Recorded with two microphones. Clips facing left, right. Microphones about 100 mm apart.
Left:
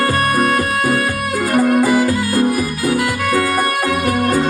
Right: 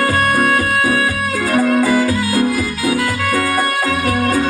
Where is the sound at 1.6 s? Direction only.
15° left (ahead or behind).